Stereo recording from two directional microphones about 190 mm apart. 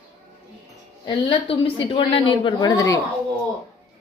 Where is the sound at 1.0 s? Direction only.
25° left (ahead or behind).